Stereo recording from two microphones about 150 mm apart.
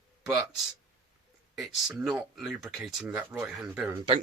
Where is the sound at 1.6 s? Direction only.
5° right (ahead or behind).